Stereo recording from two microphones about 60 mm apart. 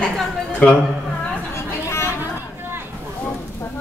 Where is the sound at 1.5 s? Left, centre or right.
Left.